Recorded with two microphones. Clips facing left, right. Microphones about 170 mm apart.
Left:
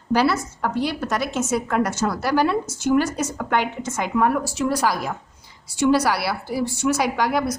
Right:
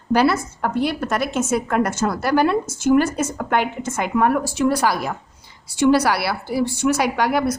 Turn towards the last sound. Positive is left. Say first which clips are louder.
# right 2 dB
turn(degrees=-60)  # may be behind; listen again after turning